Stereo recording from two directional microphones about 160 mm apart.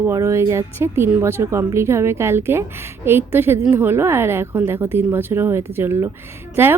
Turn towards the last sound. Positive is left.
turn(degrees=-15)  # may be behind; listen again after turning